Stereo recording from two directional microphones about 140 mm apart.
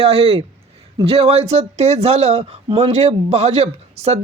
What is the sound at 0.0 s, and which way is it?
A man's voice, 45° right (ahead or behind).